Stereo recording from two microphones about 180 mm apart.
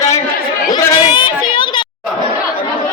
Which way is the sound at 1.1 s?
25° left (ahead or behind).